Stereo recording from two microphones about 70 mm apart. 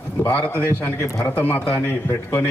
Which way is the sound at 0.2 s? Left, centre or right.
Left.